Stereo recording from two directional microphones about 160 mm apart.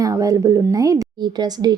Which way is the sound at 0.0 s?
20° right (ahead or behind).